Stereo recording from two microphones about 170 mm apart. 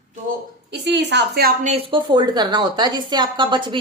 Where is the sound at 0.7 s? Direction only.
85° right.